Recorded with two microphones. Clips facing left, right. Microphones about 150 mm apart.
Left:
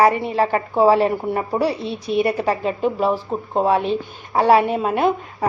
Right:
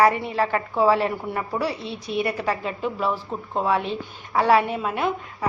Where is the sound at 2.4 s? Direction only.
40° left (ahead or behind).